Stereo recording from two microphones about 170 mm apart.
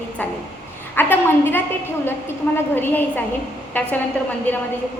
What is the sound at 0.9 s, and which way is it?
Speech, 10° left (ahead or behind).